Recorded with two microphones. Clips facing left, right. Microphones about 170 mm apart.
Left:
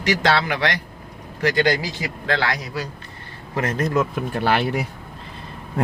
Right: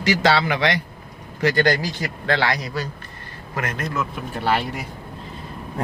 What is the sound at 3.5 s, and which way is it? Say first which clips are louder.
Speech: left 5 dB; 35° left (ahead or behind).